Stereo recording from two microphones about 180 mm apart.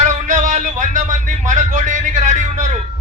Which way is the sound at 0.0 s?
45° right (ahead or behind).